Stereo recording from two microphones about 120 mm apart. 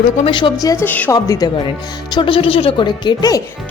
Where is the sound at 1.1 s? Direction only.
25° left (ahead or behind).